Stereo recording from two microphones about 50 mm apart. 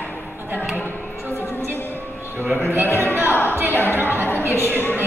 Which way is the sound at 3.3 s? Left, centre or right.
Left.